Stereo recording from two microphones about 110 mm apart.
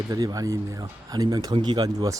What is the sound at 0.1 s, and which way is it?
Speech, 35° right (ahead or behind).